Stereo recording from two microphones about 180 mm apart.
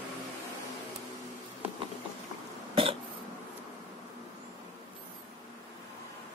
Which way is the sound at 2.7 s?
30° right (ahead or behind).